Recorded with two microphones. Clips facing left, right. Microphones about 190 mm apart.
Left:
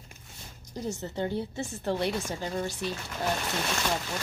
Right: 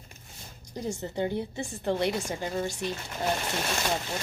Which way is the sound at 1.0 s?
15° right (ahead or behind).